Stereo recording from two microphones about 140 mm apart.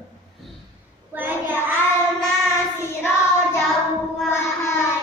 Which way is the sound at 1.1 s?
15° right (ahead or behind).